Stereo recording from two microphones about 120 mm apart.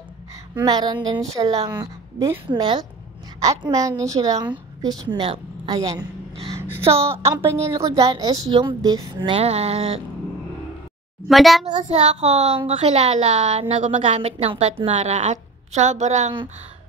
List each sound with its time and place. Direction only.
0.6 s a woman's voice: 35° right (ahead or behind)
6.8 s a woman's voice: 50° right (ahead or behind)
7.2 s a woman's voice: 25° right (ahead or behind)
7.9 s a woman's voice: 40° right (ahead or behind)
9.3 s a child's voice: 55° right (ahead or behind)
11.2 s a woman's voice: centre (ahead or behind)
11.6 s a child's voice: 70° right (ahead or behind)
15.0 s a woman's voice: 75° right (ahead or behind)